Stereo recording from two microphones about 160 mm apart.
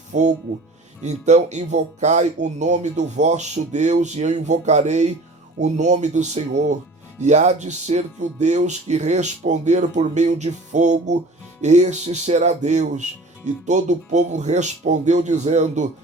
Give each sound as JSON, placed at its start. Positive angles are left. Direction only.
{"t": 0.1, "sound": "speech", "side_deg": -45}